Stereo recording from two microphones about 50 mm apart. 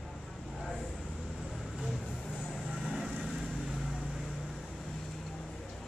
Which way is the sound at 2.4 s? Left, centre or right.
Centre.